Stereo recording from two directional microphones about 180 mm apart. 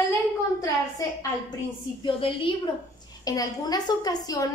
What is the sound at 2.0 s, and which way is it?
A woman's voice, 30° left (ahead or behind).